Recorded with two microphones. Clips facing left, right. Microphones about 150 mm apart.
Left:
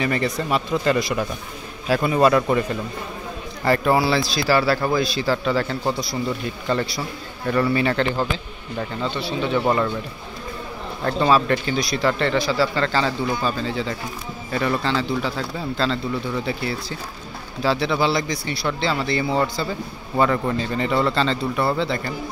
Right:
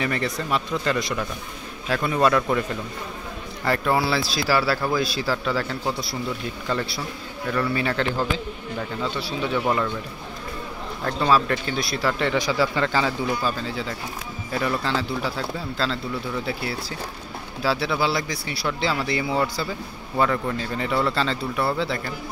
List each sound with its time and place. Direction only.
0.0 s speech: centre (ahead or behind)
3.6 s speech: 5° left (ahead or behind)
9.1 s a man's voice: 5° right (ahead or behind)
9.7 s speech: 5° left (ahead or behind)
11.1 s speech: centre (ahead or behind)
17.6 s a man's voice: 5° right (ahead or behind)